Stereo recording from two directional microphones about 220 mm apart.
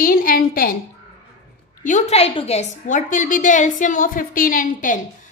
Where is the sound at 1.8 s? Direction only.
35° left (ahead or behind).